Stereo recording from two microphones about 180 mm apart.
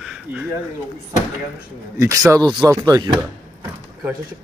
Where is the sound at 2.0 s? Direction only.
15° right (ahead or behind).